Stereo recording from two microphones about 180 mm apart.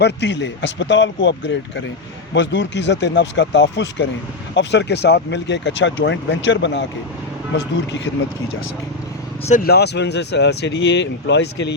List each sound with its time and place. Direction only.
0.0 s speech: 75° left (ahead or behind)
9.6 s speech: 65° left (ahead or behind)